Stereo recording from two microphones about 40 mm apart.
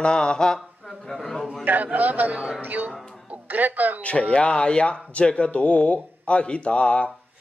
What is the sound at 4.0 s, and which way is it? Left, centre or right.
Speech, left.